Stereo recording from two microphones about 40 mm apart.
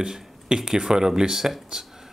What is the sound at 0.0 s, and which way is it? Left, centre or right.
Speech, centre.